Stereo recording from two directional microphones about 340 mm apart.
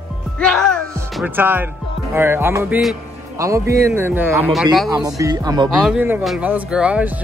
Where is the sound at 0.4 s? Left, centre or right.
Centre.